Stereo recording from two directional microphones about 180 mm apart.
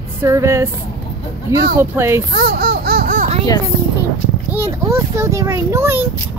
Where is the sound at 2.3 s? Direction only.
60° right (ahead or behind).